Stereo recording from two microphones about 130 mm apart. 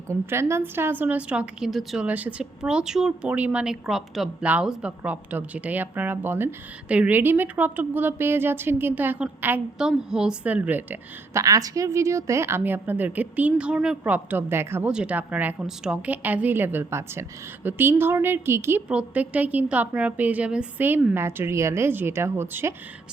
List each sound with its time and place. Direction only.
0.1 s speech: 20° right (ahead or behind)
11.3 s speech: 25° right (ahead or behind)
18.9 s speech: 10° right (ahead or behind)